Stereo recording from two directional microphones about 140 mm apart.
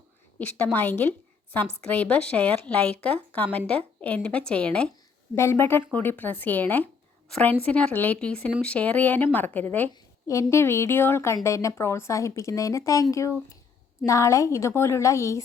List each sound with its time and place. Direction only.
0.3 s a woman's voice: 10° left (ahead or behind)
9.9 s speech: 20° left (ahead or behind)